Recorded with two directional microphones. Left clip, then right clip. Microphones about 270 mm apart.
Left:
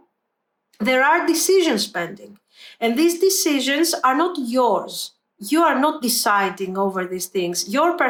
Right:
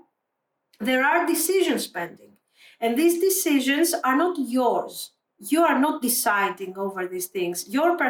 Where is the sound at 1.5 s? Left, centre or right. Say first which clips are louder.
Left 5 dB; centre.